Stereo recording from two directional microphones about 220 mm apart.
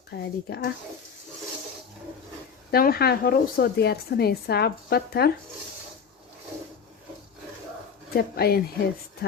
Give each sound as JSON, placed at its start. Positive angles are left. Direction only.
{"t": 0.1, "sound": "speech", "side_deg": 45}
{"t": 2.7, "sound": "speech", "side_deg": 45}
{"t": 8.1, "sound": "speech", "side_deg": 45}